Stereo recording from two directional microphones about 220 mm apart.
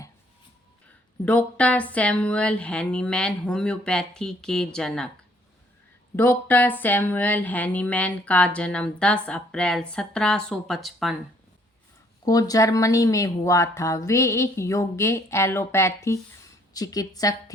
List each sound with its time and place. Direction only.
1.2 s speech: 5° left (ahead or behind)
6.1 s speech: 10° left (ahead or behind)
12.2 s speech: 15° left (ahead or behind)